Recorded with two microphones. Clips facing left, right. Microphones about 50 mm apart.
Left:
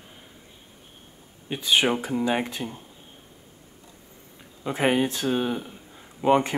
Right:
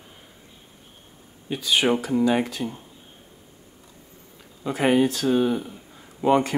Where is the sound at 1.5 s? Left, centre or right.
Left.